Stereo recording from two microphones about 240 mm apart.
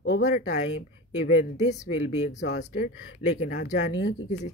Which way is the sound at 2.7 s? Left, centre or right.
Left.